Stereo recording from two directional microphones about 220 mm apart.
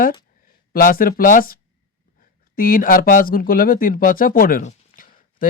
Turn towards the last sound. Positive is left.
turn(degrees=40)  # may be behind; listen again after turning